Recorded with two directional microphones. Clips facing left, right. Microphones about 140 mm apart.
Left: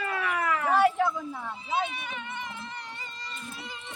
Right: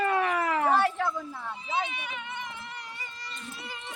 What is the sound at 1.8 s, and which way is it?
Speech, 15° right (ahead or behind).